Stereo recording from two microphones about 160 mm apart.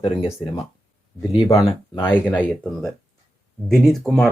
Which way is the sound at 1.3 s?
35° left (ahead or behind).